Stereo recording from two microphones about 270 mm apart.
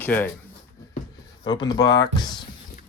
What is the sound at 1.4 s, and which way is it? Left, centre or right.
Speech, centre.